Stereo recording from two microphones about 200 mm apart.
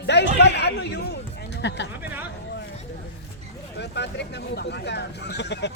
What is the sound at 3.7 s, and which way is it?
Vehicle, 60° left (ahead or behind).